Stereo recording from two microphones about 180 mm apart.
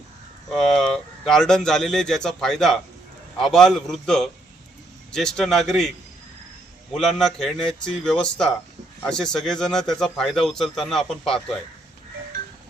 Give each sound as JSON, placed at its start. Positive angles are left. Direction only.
{"t": 0.5, "sound": "a man's voice", "side_deg": 0}
{"t": 6.9, "sound": "a man's voice", "side_deg": 0}